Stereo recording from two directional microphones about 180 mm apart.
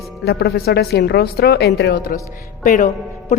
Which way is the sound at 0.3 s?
60° left (ahead or behind).